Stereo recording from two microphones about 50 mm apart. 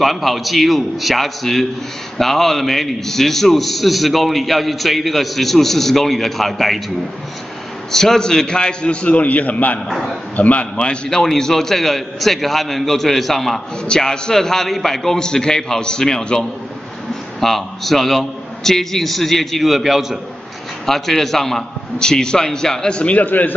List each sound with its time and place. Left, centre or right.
0.0 s a man's voice: centre
7.9 s a man's voice: centre
9.0 s a man's voice: left
9.8 s a man's voice: centre
10.3 s a man's voice: left
10.8 s a man's voice: centre
13.8 s a man's voice: centre
23.1 s a man's voice: left